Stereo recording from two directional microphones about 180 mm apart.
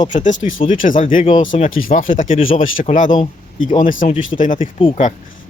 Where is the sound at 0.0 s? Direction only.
45° left (ahead or behind).